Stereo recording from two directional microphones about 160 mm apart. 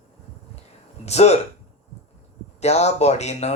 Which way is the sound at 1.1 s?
40° left (ahead or behind).